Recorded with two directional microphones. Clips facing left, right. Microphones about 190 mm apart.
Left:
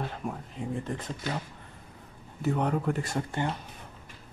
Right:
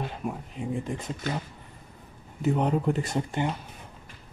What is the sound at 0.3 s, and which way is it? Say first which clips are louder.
Speech: right 2 dB; 15° right (ahead or behind).